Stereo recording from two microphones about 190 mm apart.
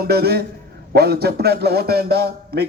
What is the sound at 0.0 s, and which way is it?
A man's voice, 55° right (ahead or behind).